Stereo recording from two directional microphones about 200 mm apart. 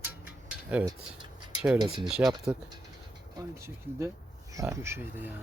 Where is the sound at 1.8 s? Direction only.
25° right (ahead or behind).